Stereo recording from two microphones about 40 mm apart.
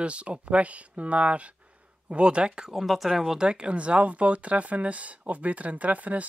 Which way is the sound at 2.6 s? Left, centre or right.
Centre.